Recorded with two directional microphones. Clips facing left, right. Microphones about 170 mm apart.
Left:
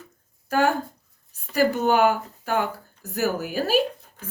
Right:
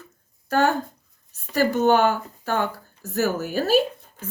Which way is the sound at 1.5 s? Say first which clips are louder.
Right 1 dB; 10° left (ahead or behind).